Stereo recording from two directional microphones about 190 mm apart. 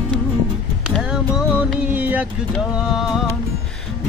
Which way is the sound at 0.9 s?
5° right (ahead or behind).